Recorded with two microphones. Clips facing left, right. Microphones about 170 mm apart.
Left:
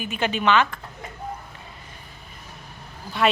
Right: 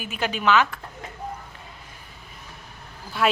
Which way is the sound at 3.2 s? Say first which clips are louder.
Left 1 dB; centre (ahead or behind).